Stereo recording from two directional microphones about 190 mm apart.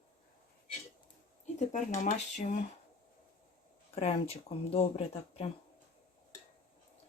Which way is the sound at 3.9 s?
35° left (ahead or behind).